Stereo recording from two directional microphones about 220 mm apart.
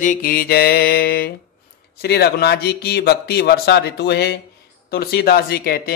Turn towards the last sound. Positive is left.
turn(degrees=45)  # may be behind; listen again after turning